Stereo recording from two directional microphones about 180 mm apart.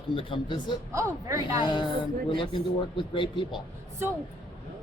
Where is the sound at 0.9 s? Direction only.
15° right (ahead or behind).